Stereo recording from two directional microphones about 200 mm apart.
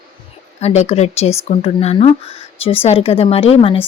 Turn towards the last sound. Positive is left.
turn(degrees=30)  # may be behind; listen again after turning